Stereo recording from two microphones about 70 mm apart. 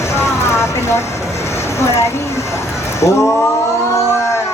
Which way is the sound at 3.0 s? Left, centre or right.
Left.